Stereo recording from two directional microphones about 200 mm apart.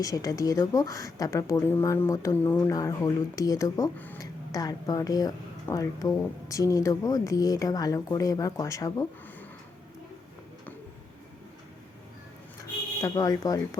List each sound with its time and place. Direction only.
0.0 s speech: 15° left (ahead or behind)
13.0 s speech: 15° left (ahead or behind)